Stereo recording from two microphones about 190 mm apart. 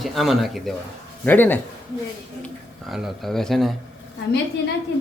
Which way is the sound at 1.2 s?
10° left (ahead or behind).